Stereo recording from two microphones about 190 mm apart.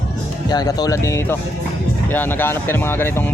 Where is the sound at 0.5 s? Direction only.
20° left (ahead or behind).